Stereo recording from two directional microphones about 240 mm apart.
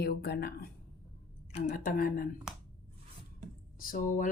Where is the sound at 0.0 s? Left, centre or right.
Left.